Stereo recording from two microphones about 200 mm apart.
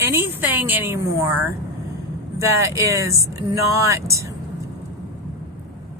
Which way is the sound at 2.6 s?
15° right (ahead or behind).